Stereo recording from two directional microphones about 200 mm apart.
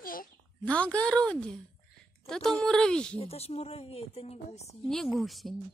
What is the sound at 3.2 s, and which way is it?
Speech, 30° left (ahead or behind).